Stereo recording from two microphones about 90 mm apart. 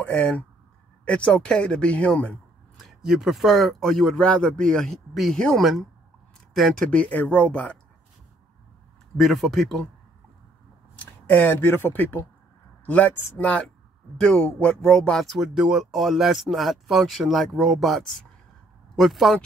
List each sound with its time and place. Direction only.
0.0 s speech: 15° left (ahead or behind)
2.8 s speech: 5° right (ahead or behind)
6.9 s speech: 15° left (ahead or behind)
9.1 s speech: centre (ahead or behind)
11.0 s speech: 20° left (ahead or behind); by 19.4 s centre (ahead or behind)